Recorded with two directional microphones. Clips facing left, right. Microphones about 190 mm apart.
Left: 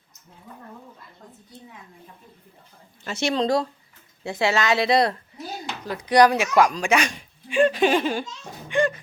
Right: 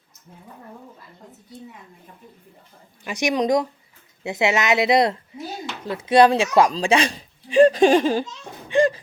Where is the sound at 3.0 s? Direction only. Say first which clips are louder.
Right 2 dB; 15° right (ahead or behind); by 8.1 s 40° right (ahead or behind).